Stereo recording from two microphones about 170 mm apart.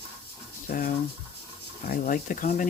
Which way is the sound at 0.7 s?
55° left (ahead or behind).